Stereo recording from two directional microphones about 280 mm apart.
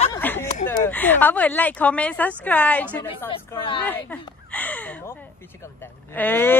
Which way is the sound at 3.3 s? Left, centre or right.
Centre.